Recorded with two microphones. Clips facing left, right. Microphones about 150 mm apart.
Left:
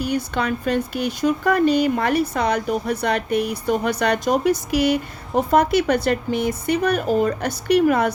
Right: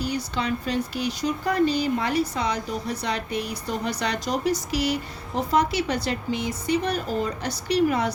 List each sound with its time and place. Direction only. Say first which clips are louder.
0.0 s speech: left 5 dB; 55° left (ahead or behind)